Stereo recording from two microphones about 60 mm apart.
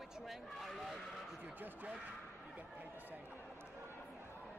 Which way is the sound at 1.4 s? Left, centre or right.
Right.